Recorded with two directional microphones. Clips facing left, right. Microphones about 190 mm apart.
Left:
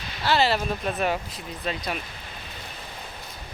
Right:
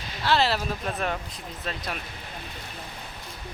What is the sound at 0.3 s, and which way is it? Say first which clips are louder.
Speech: left 2 dB; centre (ahead or behind).